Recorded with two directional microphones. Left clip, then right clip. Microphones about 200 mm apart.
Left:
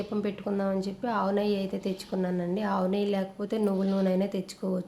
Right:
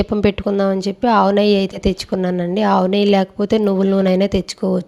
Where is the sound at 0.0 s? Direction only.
45° right (ahead or behind).